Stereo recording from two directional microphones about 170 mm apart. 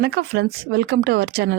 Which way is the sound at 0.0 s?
75° right (ahead or behind).